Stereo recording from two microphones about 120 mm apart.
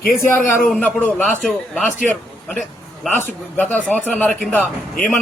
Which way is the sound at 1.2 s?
5° left (ahead or behind).